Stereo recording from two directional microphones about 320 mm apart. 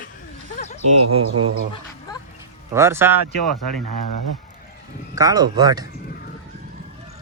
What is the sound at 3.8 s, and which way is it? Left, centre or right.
Speech, right.